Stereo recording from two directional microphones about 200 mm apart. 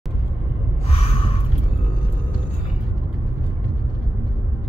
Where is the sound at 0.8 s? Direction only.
30° left (ahead or behind).